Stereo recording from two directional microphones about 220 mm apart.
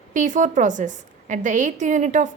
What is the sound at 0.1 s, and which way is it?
A woman's voice, 35° right (ahead or behind).